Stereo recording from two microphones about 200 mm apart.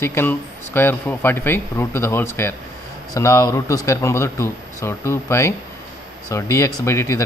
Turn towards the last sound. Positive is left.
turn(degrees=15)  # may be behind; listen again after turning